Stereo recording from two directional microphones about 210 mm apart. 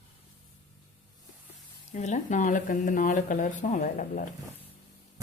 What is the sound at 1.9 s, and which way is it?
Speech, 35° left (ahead or behind).